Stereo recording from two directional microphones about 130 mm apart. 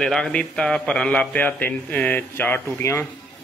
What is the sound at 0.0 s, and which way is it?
Speech, 5° left (ahead or behind).